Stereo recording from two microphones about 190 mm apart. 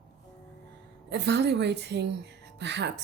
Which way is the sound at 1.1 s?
65° right (ahead or behind).